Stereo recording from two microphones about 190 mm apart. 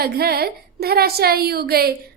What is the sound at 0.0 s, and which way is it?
A woman's voice, 55° right (ahead or behind).